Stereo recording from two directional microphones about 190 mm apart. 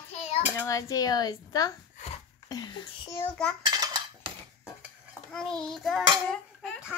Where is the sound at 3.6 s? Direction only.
20° right (ahead or behind).